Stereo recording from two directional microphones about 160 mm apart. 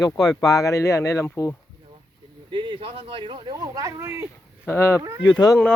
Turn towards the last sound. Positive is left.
turn(degrees=25)  # may be behind; listen again after turning